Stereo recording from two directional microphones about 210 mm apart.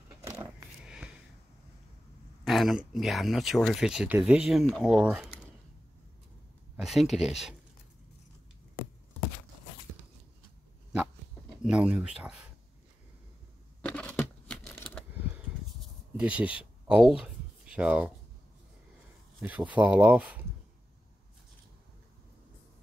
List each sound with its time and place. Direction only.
0.2 s vehicle: 20° right (ahead or behind)
0.8 s a sound: 5° right (ahead or behind)
2.4 s speech: centre (ahead or behind)
6.8 s speech: centre (ahead or behind)
11.6 s speech: 5° right (ahead or behind)
13.8 s a sound: 5° left (ahead or behind)
16.2 s speech: 5° right (ahead or behind)
19.4 s speech: 5° right (ahead or behind)